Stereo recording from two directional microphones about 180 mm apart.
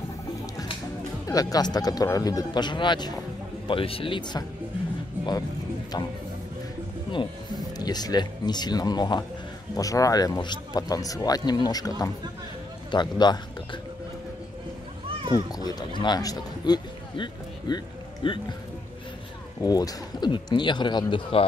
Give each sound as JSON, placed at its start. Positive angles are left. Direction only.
{"t": 1.2, "sound": "speech", "side_deg": 20}
{"t": 7.1, "sound": "speech", "side_deg": 25}
{"t": 15.5, "sound": "speech", "side_deg": 20}
{"t": 19.6, "sound": "speech", "side_deg": 20}